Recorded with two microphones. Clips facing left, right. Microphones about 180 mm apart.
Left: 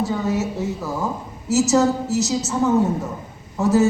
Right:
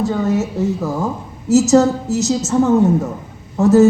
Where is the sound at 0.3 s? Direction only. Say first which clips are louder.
Right 5 dB; 50° right (ahead or behind).